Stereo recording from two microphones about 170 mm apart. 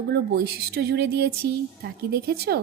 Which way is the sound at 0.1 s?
75° right (ahead or behind).